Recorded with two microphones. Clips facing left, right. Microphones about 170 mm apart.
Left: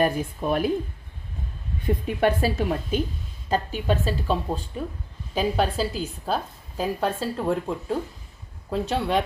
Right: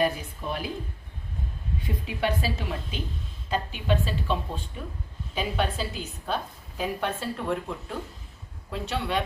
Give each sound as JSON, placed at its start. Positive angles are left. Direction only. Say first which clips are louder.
{"t": 0.0, "sound": "a woman's voice", "louder": "left 4 dB", "side_deg": 50}
{"t": 2.0, "sound": "a woman's voice", "louder": "left 5 dB", "side_deg": 50}